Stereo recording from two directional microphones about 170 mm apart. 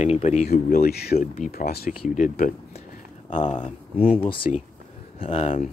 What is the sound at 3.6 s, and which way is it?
Speech, 35° left (ahead or behind).